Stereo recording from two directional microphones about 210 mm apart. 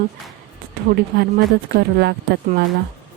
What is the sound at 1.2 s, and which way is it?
Speech, 45° right (ahead or behind).